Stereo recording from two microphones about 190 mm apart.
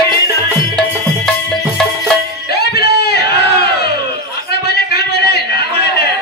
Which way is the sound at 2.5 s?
55° left (ahead or behind).